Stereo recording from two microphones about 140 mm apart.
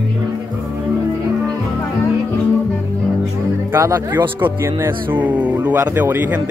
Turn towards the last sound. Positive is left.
turn(degrees=-15)  # may be behind; listen again after turning